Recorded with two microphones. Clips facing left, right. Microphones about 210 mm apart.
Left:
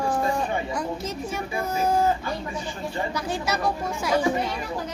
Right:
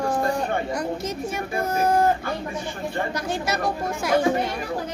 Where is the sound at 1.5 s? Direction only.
55° right (ahead or behind).